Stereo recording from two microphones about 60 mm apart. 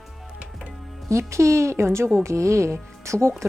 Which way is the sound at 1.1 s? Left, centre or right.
Right.